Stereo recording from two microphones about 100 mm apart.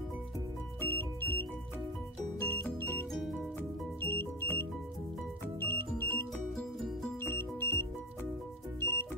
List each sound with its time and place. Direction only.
0.7 s music: 20° left (ahead or behind)
2.4 s music: 20° left (ahead or behind)
5.6 s music: 20° left (ahead or behind)
6.3 s music: 5° left (ahead or behind)
7.2 s music: 25° left (ahead or behind)